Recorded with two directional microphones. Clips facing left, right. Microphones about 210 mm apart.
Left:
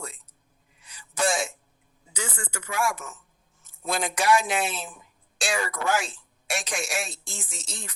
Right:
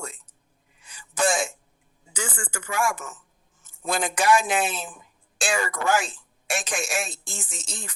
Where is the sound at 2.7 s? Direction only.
50° right (ahead or behind).